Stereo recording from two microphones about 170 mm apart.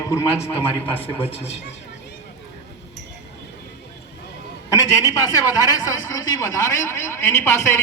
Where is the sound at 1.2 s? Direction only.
35° left (ahead or behind).